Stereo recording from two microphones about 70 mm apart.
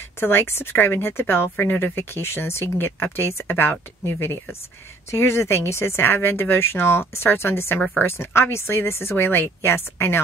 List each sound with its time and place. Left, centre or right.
0.2 s a woman's voice: left